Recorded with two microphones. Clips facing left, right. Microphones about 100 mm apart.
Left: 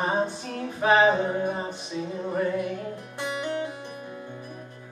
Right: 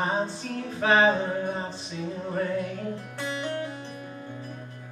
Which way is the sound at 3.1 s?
15° left (ahead or behind).